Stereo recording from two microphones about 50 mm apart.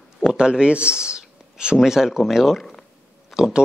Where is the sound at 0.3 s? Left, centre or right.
Centre.